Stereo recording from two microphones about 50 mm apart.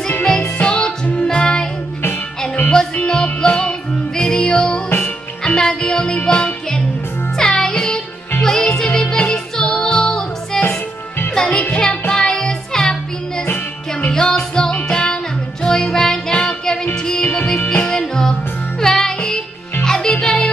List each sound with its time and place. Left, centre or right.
0.2 s music: left
3.0 s music: centre
4.8 s music: left
5.4 s music: centre
14.1 s music: centre